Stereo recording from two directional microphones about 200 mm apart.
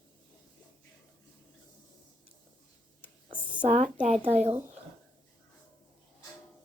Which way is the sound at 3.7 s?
35° right (ahead or behind).